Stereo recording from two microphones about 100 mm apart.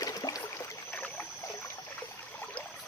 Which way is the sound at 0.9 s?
10° left (ahead or behind).